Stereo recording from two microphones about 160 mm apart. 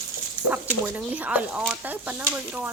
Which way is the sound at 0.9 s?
10° right (ahead or behind).